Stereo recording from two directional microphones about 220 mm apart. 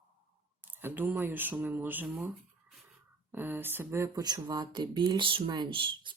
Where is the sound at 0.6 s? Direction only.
10° right (ahead or behind).